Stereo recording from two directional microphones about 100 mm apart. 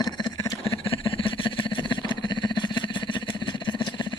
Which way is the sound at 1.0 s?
60° left (ahead or behind).